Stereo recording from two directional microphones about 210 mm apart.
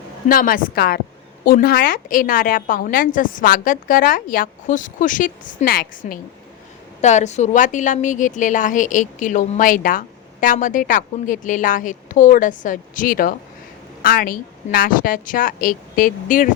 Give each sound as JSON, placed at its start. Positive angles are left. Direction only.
{"t": 0.3, "sound": "a woman's voice", "side_deg": 40}